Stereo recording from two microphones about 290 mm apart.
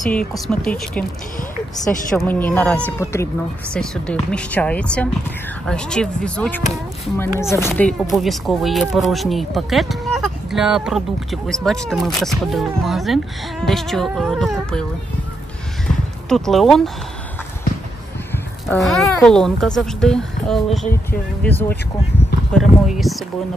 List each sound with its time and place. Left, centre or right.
0.0 s speech: centre
2.1 s speech: centre
16.3 s speech: centre
18.3 s speech: centre